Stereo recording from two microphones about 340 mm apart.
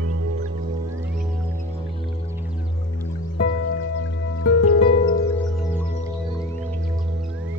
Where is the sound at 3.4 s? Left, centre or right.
Left.